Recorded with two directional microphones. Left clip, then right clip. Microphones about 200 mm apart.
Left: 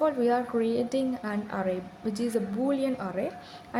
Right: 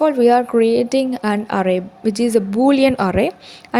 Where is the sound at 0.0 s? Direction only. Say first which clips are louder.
Right 12 dB; 35° right (ahead or behind).